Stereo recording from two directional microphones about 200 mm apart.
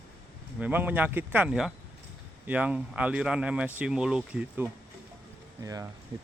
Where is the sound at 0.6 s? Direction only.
10° right (ahead or behind).